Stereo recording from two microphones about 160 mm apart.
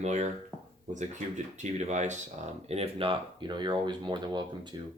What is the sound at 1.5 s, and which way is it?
Speech, 45° right (ahead or behind).